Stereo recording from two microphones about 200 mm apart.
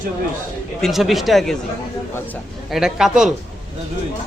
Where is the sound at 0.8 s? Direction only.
Centre (ahead or behind).